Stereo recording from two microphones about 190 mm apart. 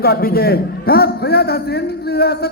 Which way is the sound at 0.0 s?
55° left (ahead or behind).